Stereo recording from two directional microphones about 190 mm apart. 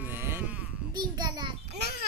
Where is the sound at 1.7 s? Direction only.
60° right (ahead or behind).